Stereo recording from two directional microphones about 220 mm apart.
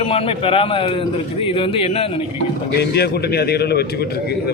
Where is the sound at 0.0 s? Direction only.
25° left (ahead or behind).